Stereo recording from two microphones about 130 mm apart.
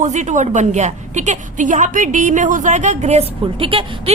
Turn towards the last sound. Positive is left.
turn(degrees=-45)  # may be behind; listen again after turning